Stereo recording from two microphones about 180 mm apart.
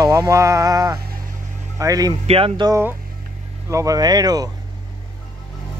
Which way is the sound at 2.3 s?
30° right (ahead or behind).